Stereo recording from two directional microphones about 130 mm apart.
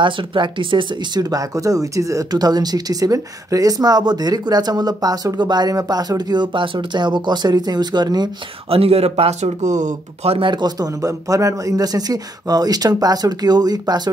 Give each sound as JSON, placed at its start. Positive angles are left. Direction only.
{"t": 0.0, "sound": "speech", "side_deg": -40}
{"t": 8.6, "sound": "speech", "side_deg": -50}
{"t": 10.3, "sound": "a man's voice", "side_deg": -40}